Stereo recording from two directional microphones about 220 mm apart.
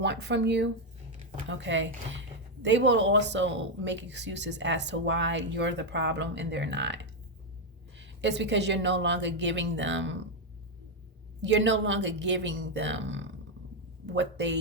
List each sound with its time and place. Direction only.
0.0 s a woman's voice: 50° right (ahead or behind)
11.4 s a woman's voice: 55° right (ahead or behind)